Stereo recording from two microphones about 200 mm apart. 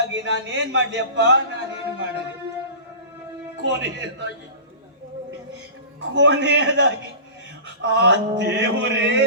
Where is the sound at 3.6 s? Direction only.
65° right (ahead or behind).